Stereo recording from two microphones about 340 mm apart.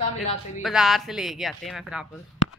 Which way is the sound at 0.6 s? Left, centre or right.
Centre.